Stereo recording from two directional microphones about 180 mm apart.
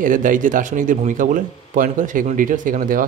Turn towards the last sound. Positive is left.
turn(degrees=-50)  # may be behind; listen again after turning